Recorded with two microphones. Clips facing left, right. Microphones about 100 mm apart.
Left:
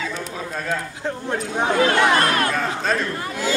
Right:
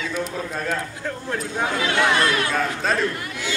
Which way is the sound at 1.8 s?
45° left (ahead or behind).